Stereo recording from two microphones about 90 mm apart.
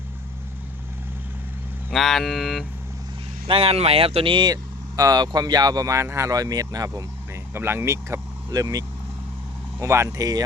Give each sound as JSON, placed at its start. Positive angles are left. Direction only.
{"t": 1.9, "sound": "speech", "side_deg": 0}
{"t": 3.4, "sound": "speech", "side_deg": -90}
{"t": 7.5, "sound": "speech", "side_deg": -25}
{"t": 8.4, "sound": "speech", "side_deg": -40}
{"t": 9.8, "sound": "speech", "side_deg": -30}